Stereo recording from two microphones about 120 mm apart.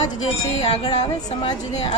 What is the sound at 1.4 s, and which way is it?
Speech, 40° left (ahead or behind).